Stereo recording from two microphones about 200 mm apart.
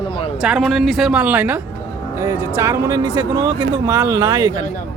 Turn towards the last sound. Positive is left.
turn(degrees=-20)  # may be behind; listen again after turning